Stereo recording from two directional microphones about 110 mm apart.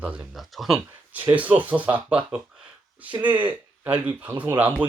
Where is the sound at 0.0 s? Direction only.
10° right (ahead or behind).